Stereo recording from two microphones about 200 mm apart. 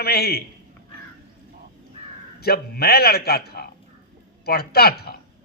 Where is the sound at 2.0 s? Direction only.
30° right (ahead or behind).